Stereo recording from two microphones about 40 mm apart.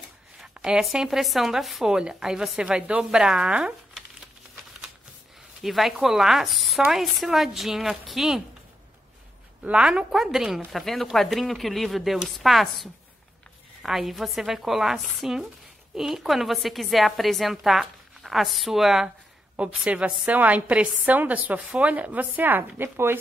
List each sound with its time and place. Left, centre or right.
0.6 s a sound: right
0.9 s a woman's voice: centre
1.9 s a woman's voice: centre
5.6 s a woman's voice: centre
9.6 s a woman's voice: right
10.1 s a woman's voice: centre
10.7 s a woman's voice: centre
19.5 s a woman's voice: right